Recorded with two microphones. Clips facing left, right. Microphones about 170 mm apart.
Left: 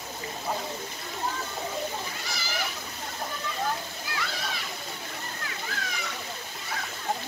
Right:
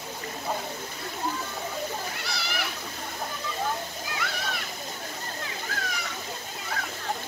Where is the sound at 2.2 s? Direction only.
65° right (ahead or behind).